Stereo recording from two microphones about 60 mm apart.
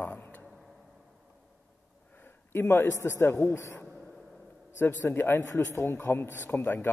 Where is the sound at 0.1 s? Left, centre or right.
Left.